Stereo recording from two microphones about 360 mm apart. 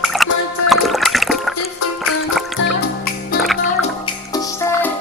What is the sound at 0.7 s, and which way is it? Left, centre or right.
Splash, centre.